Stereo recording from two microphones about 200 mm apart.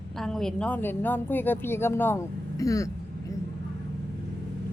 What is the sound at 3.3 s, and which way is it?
Vehicle, 15° left (ahead or behind).